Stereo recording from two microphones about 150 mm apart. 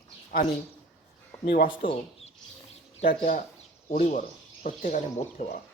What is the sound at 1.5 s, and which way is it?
Speech, 70° left (ahead or behind).